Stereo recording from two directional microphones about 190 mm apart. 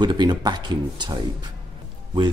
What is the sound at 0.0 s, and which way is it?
Speech, 25° right (ahead or behind).